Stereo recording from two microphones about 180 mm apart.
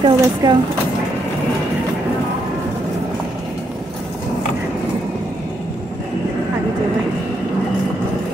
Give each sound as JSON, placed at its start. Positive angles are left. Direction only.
{"t": 0.0, "sound": "speech", "side_deg": -25}